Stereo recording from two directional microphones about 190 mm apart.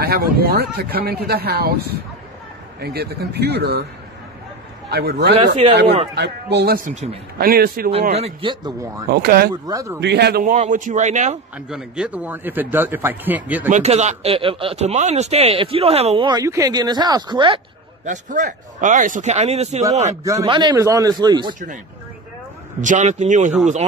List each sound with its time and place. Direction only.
0.0 s speech: 55° right (ahead or behind)
4.8 s speech: 55° right (ahead or behind)
6.9 s speech: 35° right (ahead or behind)
7.3 s a man's voice: 50° right (ahead or behind)
8.1 s speech: 30° right (ahead or behind)
9.1 s a man's voice: 55° right (ahead or behind)
9.5 s a man's voice: 20° right (ahead or behind)
9.9 s a man's voice: 60° right (ahead or behind); by 11.3 s 40° right (ahead or behind)
11.5 s a man's voice: 5° right (ahead or behind)
13.7 s speech: 35° right (ahead or behind)
18.0 s speech: 40° right (ahead or behind)
20.3 s speech: 25° right (ahead or behind)
22.8 s speech: 40° right (ahead or behind)